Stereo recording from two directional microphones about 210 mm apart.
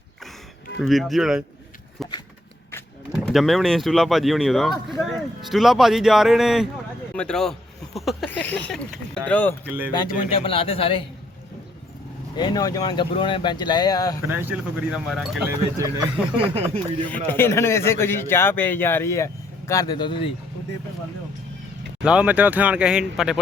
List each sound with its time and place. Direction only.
0.8 s speech: centre (ahead or behind)
3.2 s a man's voice: centre (ahead or behind)
9.6 s speech: 10° right (ahead or behind)
10.4 s speech: 25° left (ahead or behind)
12.4 s speech: 20° left (ahead or behind)
14.3 s speech: 10° right (ahead or behind)
15.8 s speech: 20° right (ahead or behind)
17.1 s a man's voice: 10° left (ahead or behind)
22.0 s speech: 5° right (ahead or behind)